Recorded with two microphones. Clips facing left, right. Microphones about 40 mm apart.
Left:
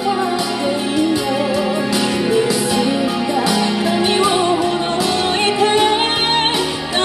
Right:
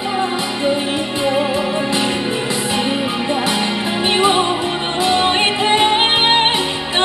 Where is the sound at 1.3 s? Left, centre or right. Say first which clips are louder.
Even; right.